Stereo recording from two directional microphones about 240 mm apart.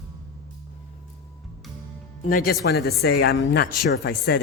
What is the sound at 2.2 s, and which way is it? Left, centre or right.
Speech, left.